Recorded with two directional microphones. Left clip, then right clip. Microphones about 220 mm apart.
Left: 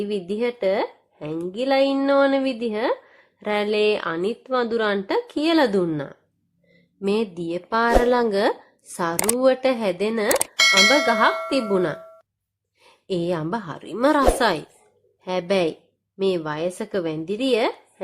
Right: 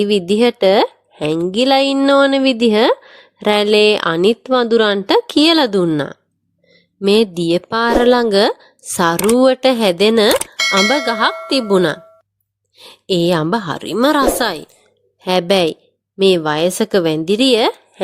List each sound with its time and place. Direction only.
0.0 s a woman's voice: 45° right (ahead or behind)
10.5 s bell: centre (ahead or behind)
11.0 s a woman's voice: 45° right (ahead or behind)